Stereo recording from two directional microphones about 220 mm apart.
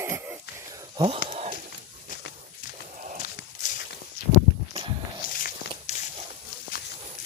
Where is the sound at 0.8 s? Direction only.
20° right (ahead or behind).